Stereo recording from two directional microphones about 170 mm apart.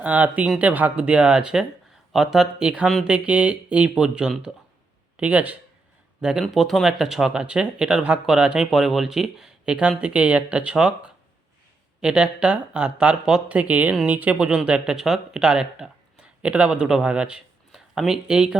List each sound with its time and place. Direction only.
0.0 s speech: 10° right (ahead or behind)